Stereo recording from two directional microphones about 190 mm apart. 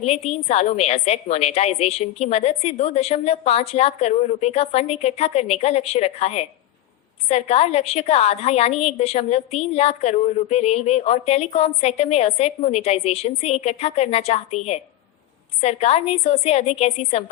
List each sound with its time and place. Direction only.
0.0 s a woman's voice: 35° left (ahead or behind)